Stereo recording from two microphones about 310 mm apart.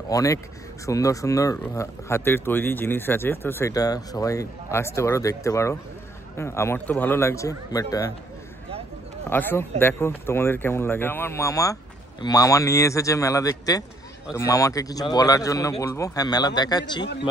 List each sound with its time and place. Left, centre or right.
0.1 s speech: centre
9.3 s speech: centre